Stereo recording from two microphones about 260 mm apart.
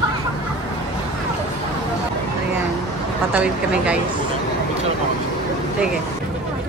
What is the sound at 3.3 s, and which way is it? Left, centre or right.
Speech, centre.